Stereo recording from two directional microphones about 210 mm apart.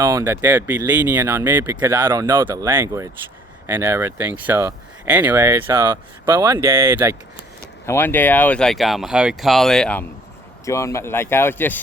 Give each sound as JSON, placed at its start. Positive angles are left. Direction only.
{"t": 0.0, "sound": "speech", "side_deg": -15}
{"t": 7.9, "sound": "speech", "side_deg": 10}